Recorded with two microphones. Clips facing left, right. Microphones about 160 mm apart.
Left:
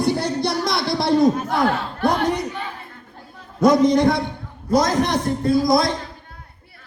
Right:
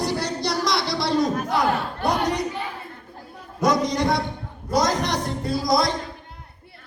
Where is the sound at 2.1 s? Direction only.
55° left (ahead or behind).